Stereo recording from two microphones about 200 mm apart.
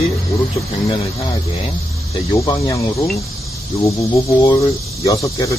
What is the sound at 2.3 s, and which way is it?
Speech, 15° left (ahead or behind).